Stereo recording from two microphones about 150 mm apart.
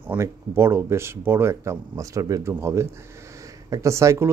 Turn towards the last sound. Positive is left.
turn(degrees=-20)  # may be behind; listen again after turning